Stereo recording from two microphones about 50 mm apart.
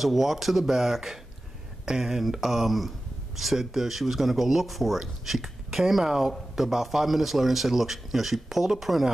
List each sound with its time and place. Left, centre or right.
0.0 s speech: centre